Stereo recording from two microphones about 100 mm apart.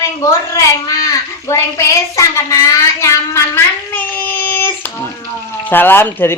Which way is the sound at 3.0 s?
30° left (ahead or behind).